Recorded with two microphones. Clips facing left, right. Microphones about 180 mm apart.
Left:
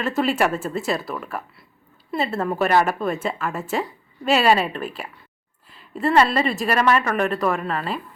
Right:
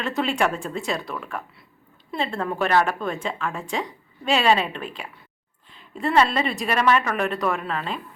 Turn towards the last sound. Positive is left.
turn(degrees=5)  # may be behind; listen again after turning